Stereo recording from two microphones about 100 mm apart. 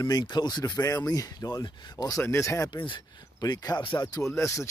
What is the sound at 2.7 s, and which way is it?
Speech, 55° left (ahead or behind).